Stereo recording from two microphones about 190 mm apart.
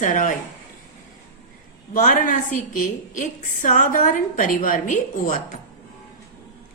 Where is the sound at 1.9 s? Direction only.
45° left (ahead or behind).